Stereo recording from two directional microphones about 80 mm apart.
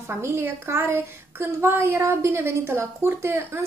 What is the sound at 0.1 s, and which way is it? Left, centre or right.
A woman's voice, right.